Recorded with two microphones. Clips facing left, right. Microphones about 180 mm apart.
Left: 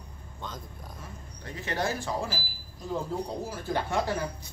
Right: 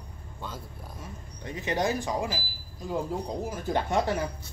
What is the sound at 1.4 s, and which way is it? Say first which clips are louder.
Speech: right 3 dB; 15° right (ahead or behind).